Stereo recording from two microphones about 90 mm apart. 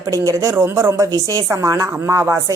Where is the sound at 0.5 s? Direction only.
25° right (ahead or behind).